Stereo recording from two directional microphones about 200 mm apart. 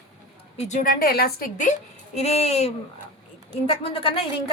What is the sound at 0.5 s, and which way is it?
A woman's voice, 35° left (ahead or behind).